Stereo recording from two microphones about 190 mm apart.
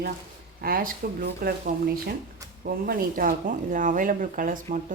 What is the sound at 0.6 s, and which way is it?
Speech, 50° right (ahead or behind).